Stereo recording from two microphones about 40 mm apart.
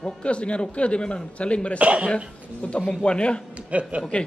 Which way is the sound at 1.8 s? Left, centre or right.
Right.